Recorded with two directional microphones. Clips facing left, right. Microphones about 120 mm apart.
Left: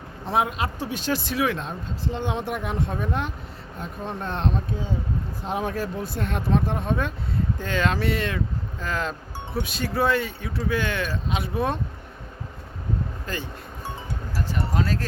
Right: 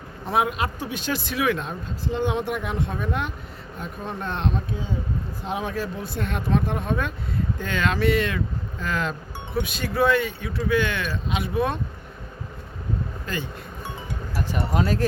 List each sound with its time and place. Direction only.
0.3 s speech: 30° left (ahead or behind)
13.2 s music: 35° left (ahead or behind)
14.3 s speech: 15° right (ahead or behind)